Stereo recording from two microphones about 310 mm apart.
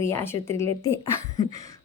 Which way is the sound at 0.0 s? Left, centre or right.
Centre.